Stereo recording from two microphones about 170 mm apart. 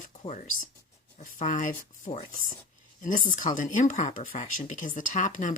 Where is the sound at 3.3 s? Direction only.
50° left (ahead or behind).